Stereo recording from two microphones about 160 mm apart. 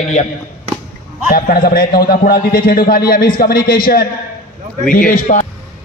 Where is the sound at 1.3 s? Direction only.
65° left (ahead or behind).